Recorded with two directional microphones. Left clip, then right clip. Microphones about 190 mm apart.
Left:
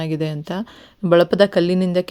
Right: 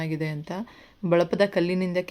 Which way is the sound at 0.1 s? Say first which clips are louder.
Left 7 dB; 30° left (ahead or behind).